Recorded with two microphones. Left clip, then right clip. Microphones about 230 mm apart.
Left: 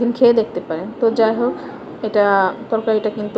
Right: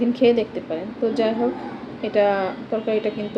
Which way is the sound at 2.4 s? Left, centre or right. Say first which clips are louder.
Left 7 dB; centre.